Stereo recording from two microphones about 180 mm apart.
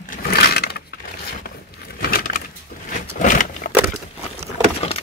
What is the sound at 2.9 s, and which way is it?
Vehicle, 45° left (ahead or behind).